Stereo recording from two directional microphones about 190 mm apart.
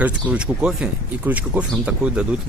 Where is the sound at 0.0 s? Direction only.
5° right (ahead or behind).